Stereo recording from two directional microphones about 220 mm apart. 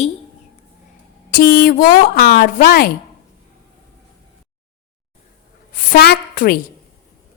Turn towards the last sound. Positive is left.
turn(degrees=40)  # may be behind; listen again after turning